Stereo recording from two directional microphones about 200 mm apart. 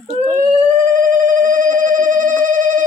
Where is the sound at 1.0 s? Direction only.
40° right (ahead or behind).